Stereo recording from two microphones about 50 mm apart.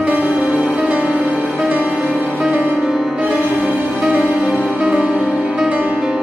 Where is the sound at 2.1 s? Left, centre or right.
Centre.